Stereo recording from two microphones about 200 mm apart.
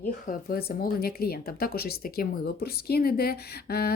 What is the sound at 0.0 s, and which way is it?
Speech, 45° left (ahead or behind).